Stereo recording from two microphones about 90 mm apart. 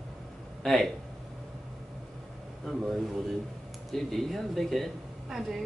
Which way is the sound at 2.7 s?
5° left (ahead or behind).